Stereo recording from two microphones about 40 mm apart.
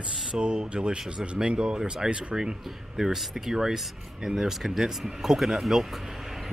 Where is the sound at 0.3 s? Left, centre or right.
Right.